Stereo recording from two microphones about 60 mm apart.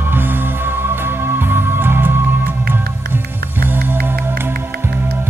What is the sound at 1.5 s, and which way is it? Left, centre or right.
Music, right.